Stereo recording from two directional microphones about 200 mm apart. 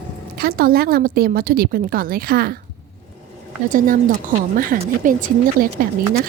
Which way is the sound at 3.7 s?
45° right (ahead or behind).